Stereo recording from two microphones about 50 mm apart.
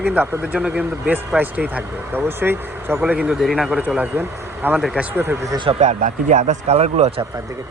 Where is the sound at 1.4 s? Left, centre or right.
Right.